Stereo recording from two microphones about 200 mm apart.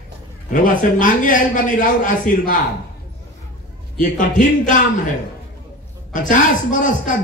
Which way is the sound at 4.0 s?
40° left (ahead or behind).